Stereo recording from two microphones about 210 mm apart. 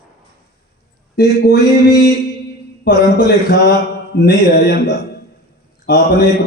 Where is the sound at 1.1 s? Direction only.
50° left (ahead or behind).